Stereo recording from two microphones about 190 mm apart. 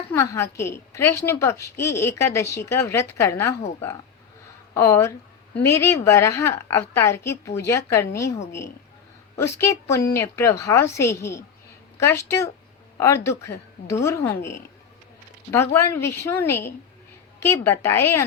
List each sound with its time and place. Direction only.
0.1 s a woman's voice: 15° left (ahead or behind)
4.7 s a woman's voice: 15° left (ahead or behind)
9.3 s a woman's voice: 15° left (ahead or behind)